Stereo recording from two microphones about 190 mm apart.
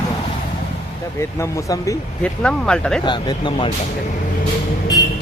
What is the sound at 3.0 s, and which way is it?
Speech, 25° left (ahead or behind).